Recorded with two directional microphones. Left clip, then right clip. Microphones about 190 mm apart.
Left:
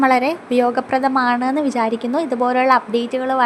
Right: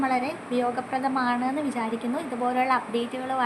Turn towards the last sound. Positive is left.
turn(degrees=45)  # may be behind; listen again after turning